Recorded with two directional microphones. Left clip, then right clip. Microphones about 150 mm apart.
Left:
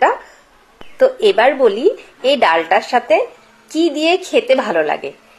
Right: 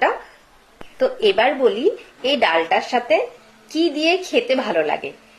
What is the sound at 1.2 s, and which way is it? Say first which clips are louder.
A woman's voice: left 2 dB; 25° left (ahead or behind).